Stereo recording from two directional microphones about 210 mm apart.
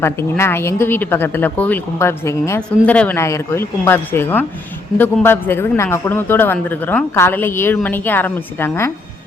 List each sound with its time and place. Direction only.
0.0 s a woman's voice: 10° left (ahead or behind)